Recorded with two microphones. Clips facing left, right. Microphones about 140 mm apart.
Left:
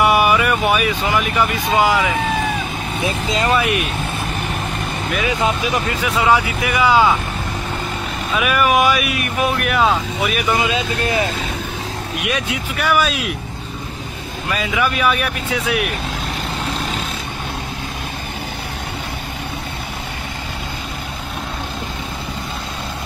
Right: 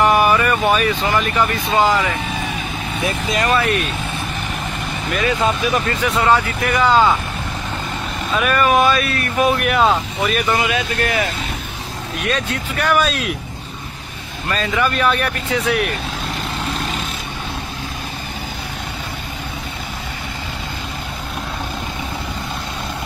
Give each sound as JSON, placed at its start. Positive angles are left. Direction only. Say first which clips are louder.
{"t": 0.0, "sound": "speech", "louder": "even", "side_deg": 10}
{"t": 3.0, "sound": "speech", "louder": "even", "side_deg": 25}
{"t": 5.4, "sound": "speech", "louder": "right 1 dB", "side_deg": 15}
{"t": 8.4, "sound": "speech", "louder": "right 1 dB", "side_deg": 10}
{"t": 9.6, "sound": "speech", "louder": "right 1 dB", "side_deg": 0}
{"t": 10.5, "sound": "speech", "louder": "even", "side_deg": 20}
{"t": 12.3, "sound": "speech", "louder": "right 2 dB", "side_deg": 10}
{"t": 14.5, "sound": "speech", "louder": "right 1 dB", "side_deg": 10}